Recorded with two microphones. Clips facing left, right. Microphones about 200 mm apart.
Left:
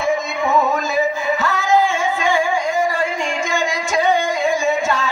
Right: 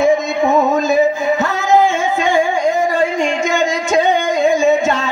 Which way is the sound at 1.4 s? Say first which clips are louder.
Right 3 dB; 20° right (ahead or behind).